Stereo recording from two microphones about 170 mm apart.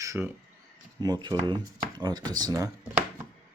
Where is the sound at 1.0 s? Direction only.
25° right (ahead or behind).